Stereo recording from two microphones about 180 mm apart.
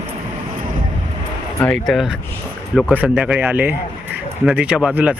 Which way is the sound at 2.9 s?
10° right (ahead or behind).